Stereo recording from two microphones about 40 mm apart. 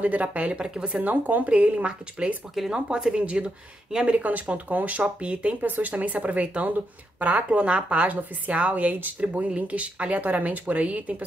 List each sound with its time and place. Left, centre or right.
0.0 s a woman's voice: right
0.6 s speech: right
1.0 s a woman's voice: right
10.2 s a woman's voice: right